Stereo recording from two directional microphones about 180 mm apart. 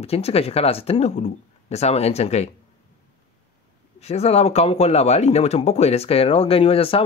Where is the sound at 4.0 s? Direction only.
35° left (ahead or behind).